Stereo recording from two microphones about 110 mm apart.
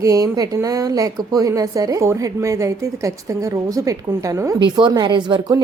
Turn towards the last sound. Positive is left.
turn(degrees=-45)  # may be behind; listen again after turning